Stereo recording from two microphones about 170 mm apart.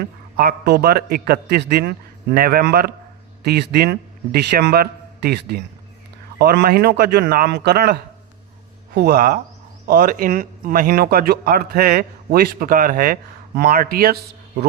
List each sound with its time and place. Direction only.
0.0 s speech: 65° right (ahead or behind)